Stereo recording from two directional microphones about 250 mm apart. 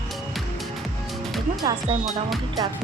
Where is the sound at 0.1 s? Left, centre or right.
Centre.